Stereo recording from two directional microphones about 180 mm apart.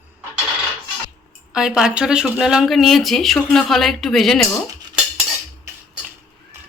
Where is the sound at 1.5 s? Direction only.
5° right (ahead or behind).